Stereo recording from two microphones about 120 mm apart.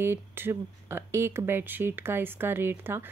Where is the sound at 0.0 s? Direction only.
20° right (ahead or behind).